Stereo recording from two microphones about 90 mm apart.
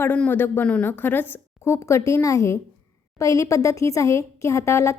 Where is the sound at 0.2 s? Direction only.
20° left (ahead or behind).